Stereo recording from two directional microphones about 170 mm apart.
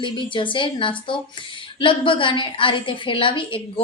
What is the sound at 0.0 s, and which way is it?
A woman's voice, 30° left (ahead or behind).